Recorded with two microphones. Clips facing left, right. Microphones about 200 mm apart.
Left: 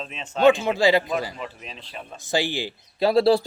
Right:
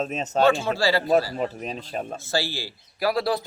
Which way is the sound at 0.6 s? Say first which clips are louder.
Left 3 dB; 20° left (ahead or behind).